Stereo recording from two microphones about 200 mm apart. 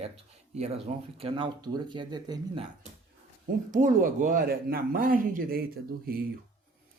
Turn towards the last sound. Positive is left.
turn(degrees=-50)  # may be behind; listen again after turning